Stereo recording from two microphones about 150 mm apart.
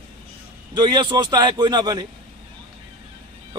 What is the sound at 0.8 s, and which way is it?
A man's voice, 30° right (ahead or behind).